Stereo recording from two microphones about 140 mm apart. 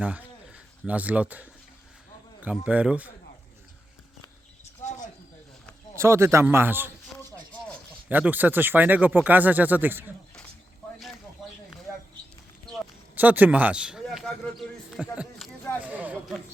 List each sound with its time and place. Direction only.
0.0 s speech: 10° right (ahead or behind)
4.8 s cricket: 55° left (ahead or behind)
6.0 s speech: 20° right (ahead or behind)
8.1 s speech: 15° right (ahead or behind)
13.1 s speech: 10° right (ahead or behind)
15.8 s chatter: 10° right (ahead or behind)